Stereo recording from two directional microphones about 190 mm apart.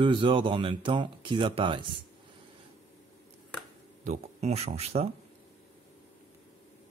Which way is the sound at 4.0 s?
35° right (ahead or behind).